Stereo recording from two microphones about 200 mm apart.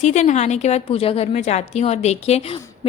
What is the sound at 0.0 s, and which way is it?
A woman's voice, 35° left (ahead or behind).